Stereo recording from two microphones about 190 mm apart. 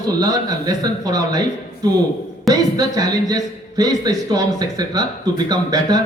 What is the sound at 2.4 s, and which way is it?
A man's voice, 20° right (ahead or behind).